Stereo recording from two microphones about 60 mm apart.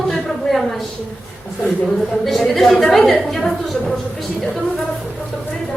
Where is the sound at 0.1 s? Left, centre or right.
Centre.